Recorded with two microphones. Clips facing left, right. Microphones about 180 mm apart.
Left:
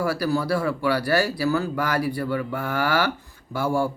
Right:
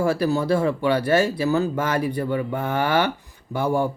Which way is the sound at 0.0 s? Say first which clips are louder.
Right 3 dB; 25° right (ahead or behind).